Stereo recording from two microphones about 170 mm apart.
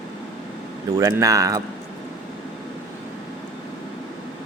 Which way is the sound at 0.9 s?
20° right (ahead or behind).